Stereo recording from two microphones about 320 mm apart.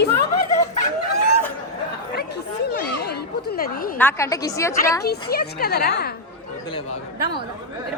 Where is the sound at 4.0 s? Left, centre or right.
Centre.